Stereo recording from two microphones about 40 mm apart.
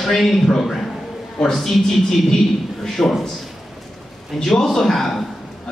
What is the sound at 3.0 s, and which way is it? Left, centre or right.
Speech, left.